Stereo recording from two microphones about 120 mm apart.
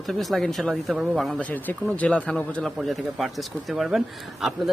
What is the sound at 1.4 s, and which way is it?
A man's voice, 15° left (ahead or behind).